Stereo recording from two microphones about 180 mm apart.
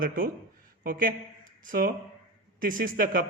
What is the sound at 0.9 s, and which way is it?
Speech, 50° right (ahead or behind).